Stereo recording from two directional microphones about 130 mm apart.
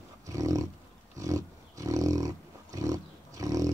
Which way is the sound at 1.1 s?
25° right (ahead or behind).